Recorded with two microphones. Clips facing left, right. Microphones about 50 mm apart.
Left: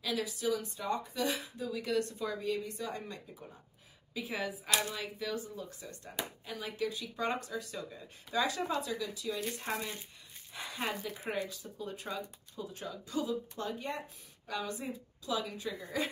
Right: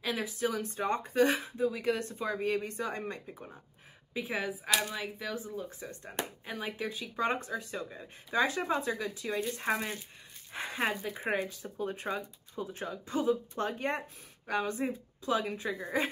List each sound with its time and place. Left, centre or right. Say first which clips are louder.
0.0 s speech: right 2 dB; right
2.3 s speech: right 6 dB; right
4.1 s a woman's voice: right 3 dB; right
4.7 s speech: even; centre
5.8 s speech: right 3 dB; right